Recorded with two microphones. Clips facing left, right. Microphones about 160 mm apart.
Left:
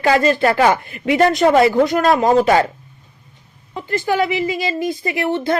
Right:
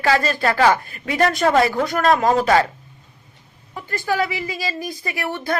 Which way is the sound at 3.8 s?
20° left (ahead or behind).